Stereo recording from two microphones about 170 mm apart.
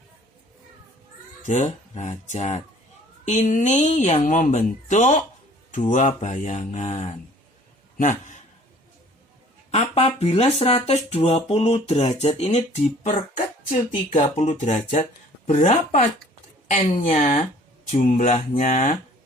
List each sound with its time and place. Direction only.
1.5 s a man's voice: 45° left (ahead or behind)
9.7 s speech: 40° left (ahead or behind)
16.9 s speech: 40° left (ahead or behind)